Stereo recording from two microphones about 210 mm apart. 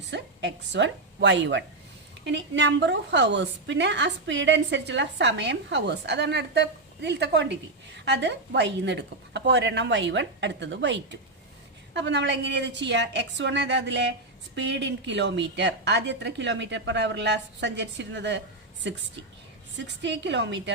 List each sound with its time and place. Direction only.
0.1 s a woman's voice: 55° right (ahead or behind)